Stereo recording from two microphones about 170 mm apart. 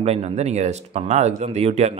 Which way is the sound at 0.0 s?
40° right (ahead or behind).